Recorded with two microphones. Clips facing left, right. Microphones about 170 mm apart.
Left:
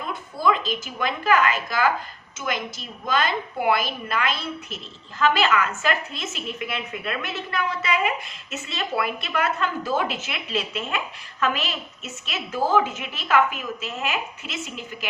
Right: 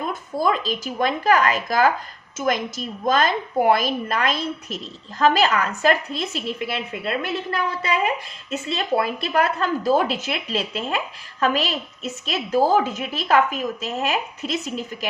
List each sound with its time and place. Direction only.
0.1 s a woman's voice: 40° right (ahead or behind)